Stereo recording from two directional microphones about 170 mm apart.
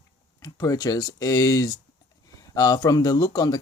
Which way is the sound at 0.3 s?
20° left (ahead or behind).